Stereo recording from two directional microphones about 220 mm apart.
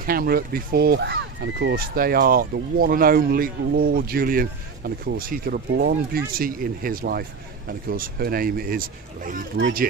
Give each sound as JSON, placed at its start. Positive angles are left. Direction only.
{"t": 0.0, "sound": "speech", "side_deg": -40}
{"t": 9.6, "sound": "speech", "side_deg": -55}